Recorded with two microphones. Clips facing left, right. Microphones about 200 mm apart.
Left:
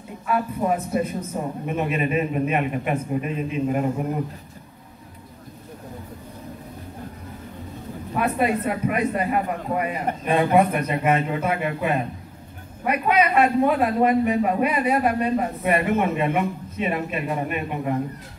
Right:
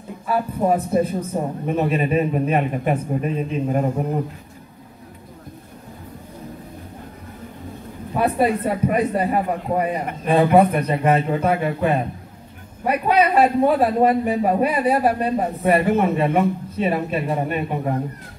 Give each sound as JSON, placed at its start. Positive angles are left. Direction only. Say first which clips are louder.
{"t": 0.3, "sound": "a man's voice", "louder": "right 3 dB", "side_deg": -35}
{"t": 8.2, "sound": "a man's voice", "louder": "right 3 dB", "side_deg": -35}
{"t": 11.1, "sound": "a man's voice", "louder": "right 4 dB", "side_deg": 5}
{"t": 12.8, "sound": "a man's voice", "louder": "right 3 dB", "side_deg": -35}